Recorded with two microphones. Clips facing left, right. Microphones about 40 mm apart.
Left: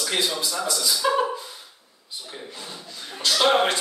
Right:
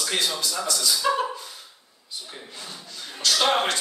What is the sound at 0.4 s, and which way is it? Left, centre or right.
Speech, left.